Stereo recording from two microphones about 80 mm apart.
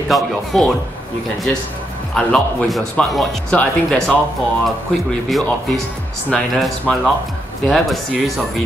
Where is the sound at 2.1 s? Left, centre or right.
Centre.